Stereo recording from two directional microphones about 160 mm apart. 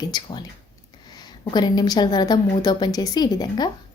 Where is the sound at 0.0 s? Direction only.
25° left (ahead or behind).